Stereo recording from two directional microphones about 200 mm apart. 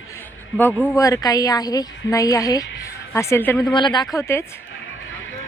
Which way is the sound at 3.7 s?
25° left (ahead or behind).